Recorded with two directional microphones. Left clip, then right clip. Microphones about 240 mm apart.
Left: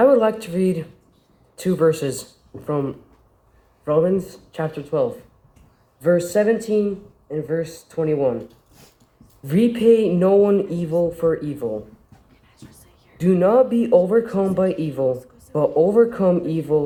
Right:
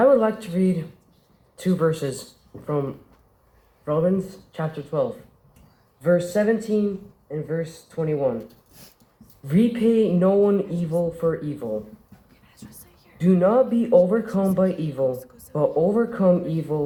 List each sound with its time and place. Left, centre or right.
0.0 s speech: left
9.4 s speech: left
13.1 s speech: left